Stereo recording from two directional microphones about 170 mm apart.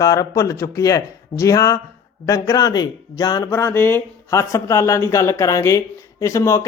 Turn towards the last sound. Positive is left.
turn(degrees=20)  # may be behind; listen again after turning